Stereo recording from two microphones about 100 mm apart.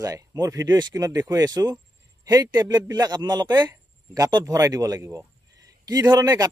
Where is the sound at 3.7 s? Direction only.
35° right (ahead or behind).